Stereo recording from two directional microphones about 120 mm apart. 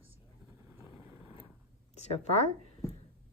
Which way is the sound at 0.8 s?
20° right (ahead or behind).